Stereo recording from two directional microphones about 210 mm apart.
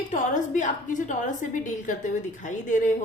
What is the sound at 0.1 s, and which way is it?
A woman's voice, 35° left (ahead or behind).